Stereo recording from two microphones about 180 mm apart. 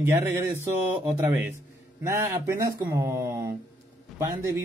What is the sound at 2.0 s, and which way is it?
Speech, 15° right (ahead or behind).